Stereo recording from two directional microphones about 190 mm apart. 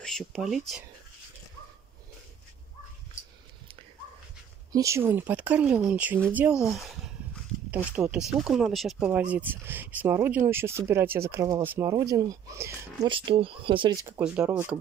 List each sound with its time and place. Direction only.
0.0 s speech: centre (ahead or behind)
4.7 s speech: 15° right (ahead or behind)
11.9 s speech: 20° right (ahead or behind)
13.1 s speech: 30° right (ahead or behind)
14.0 s speech: 10° right (ahead or behind)